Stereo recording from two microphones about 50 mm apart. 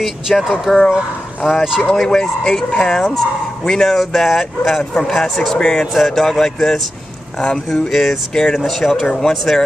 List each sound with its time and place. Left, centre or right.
0.0 s speech: centre
2.0 s speech: centre
7.3 s speech: left
7.8 s speech: centre